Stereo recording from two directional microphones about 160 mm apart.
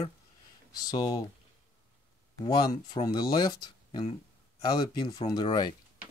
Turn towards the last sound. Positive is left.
turn(degrees=25)  # may be behind; listen again after turning